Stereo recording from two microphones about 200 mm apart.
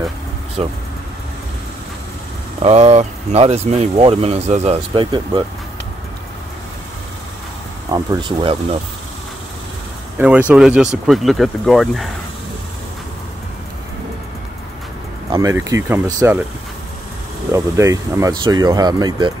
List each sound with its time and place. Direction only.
0.6 s speech: 30° right (ahead or behind)
2.6 s speech: 30° right (ahead or behind)
7.9 s speech: 20° right (ahead or behind)
10.1 s speech: 10° right (ahead or behind)
15.3 s speech: 15° right (ahead or behind)
17.5 s speech: 15° right (ahead or behind)